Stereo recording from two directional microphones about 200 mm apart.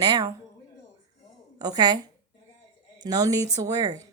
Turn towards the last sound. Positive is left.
turn(degrees=-20)  # may be behind; listen again after turning